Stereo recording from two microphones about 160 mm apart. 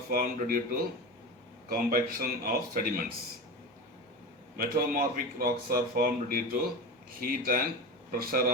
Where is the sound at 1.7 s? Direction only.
65° right (ahead or behind).